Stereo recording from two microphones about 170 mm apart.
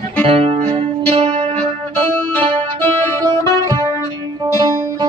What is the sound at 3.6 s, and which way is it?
Music, 25° right (ahead or behind).